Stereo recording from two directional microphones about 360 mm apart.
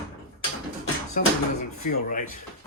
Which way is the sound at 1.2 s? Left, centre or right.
Left.